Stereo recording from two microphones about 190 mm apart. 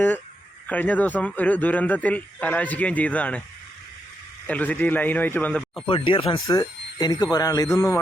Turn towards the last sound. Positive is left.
turn(degrees=15)  # may be behind; listen again after turning